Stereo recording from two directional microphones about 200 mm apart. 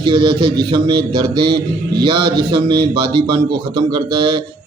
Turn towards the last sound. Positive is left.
turn(degrees=-25)  # may be behind; listen again after turning